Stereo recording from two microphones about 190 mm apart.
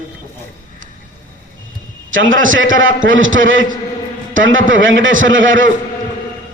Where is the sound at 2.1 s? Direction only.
90° right.